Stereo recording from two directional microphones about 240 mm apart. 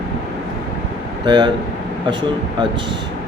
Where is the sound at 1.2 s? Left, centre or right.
Centre.